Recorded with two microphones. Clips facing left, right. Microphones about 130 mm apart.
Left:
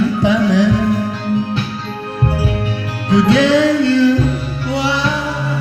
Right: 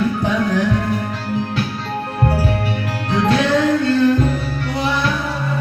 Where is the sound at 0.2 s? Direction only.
90° left.